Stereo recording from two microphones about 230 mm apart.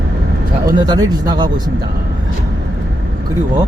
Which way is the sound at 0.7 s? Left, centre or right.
Centre.